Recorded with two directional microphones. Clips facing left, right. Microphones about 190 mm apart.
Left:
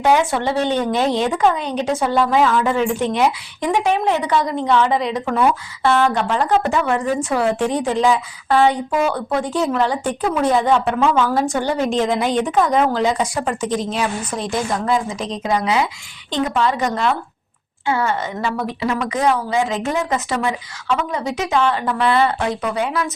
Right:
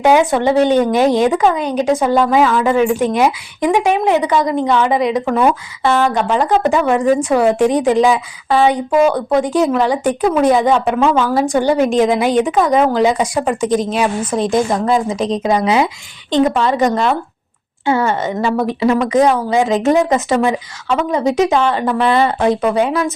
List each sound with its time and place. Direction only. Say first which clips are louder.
0.0 s a woman's voice: right 5 dB; 15° right (ahead or behind)
21.1 s a woman's voice: right 7 dB; 20° right (ahead or behind)